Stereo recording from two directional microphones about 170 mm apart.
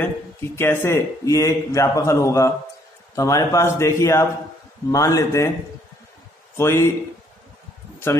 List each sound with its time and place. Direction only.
0.0 s speech: 15° left (ahead or behind)
6.5 s speech: 15° left (ahead or behind)